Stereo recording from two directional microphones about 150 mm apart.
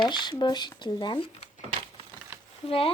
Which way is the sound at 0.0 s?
30° left (ahead or behind).